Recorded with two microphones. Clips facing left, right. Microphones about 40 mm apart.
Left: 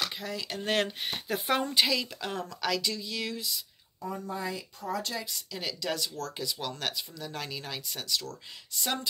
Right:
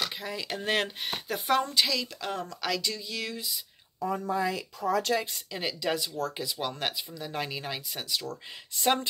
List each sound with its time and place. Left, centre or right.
0.0 s a sound: centre
0.7 s speech: centre
1.5 s a woman's voice: centre
1.9 s speech: centre
4.0 s speech: right
5.5 s speech: right
8.8 s speech: right